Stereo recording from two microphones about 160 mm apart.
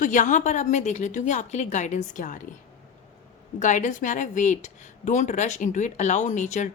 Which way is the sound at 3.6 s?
50° left (ahead or behind).